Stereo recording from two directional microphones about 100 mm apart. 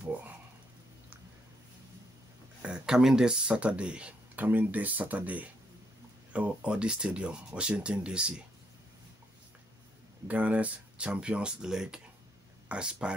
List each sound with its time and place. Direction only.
0.1 s a sound: 15° right (ahead or behind)
2.6 s speech: 10° right (ahead or behind)
10.2 s speech: 15° right (ahead or behind)